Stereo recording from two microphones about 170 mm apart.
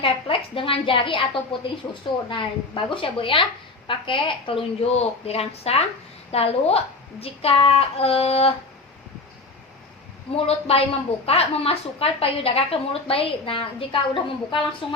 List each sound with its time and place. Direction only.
0.0 s a woman's voice: 30° left (ahead or behind)
10.3 s a woman's voice: 35° left (ahead or behind)